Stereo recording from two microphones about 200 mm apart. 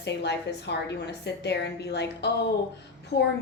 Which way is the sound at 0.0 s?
60° left (ahead or behind).